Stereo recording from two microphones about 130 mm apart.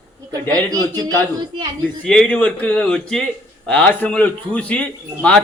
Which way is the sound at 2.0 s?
5° left (ahead or behind).